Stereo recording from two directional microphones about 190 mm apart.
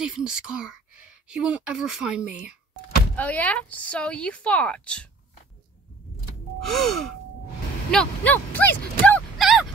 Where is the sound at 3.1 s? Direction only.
10° left (ahead or behind).